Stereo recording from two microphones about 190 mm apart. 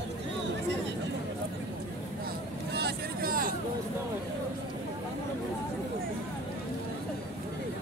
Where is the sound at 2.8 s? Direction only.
55° right (ahead or behind).